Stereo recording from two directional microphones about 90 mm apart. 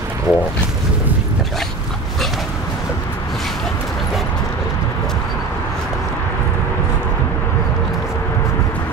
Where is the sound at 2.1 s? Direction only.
5° left (ahead or behind).